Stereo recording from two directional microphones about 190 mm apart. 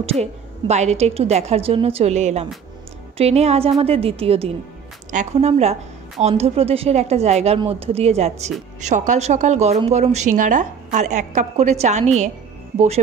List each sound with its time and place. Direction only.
0.0 s a woman's voice: 35° right (ahead or behind)